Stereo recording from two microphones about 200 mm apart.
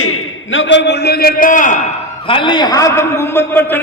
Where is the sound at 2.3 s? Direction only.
25° left (ahead or behind).